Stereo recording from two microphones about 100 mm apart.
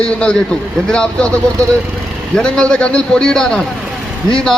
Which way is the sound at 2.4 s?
10° left (ahead or behind).